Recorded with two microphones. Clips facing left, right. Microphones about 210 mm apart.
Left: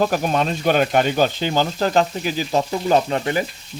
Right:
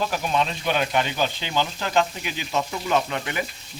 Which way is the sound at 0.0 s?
45° left (ahead or behind).